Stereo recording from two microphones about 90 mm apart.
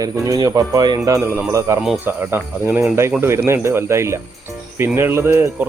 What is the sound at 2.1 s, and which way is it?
Speech, 25° right (ahead or behind).